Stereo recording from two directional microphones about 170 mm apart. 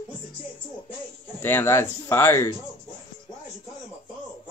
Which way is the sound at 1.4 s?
15° left (ahead or behind).